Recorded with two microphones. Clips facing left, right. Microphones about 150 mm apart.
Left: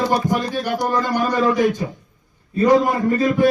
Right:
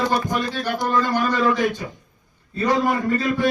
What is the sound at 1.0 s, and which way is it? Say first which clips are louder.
Speech: even; 15° left (ahead or behind).